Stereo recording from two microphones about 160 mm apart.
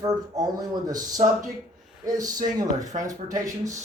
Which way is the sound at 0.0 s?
25° right (ahead or behind).